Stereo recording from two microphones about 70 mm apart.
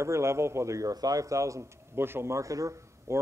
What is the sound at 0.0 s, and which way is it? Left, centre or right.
Speech, right.